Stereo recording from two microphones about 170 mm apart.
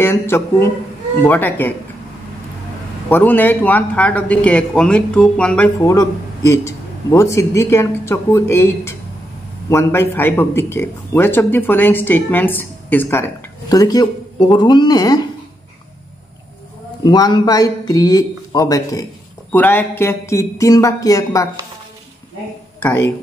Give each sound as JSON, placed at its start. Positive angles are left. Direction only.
{"t": 0.0, "sound": "a man's voice", "side_deg": 15}
{"t": 3.1, "sound": "a man's voice", "side_deg": 10}
{"t": 5.9, "sound": "a man's voice", "side_deg": 15}
{"t": 13.7, "sound": "speech", "side_deg": 20}
{"t": 17.0, "sound": "a man's voice", "side_deg": 25}
{"t": 22.8, "sound": "a man's voice", "side_deg": 15}